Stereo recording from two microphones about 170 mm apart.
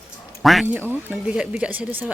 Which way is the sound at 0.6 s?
10° right (ahead or behind).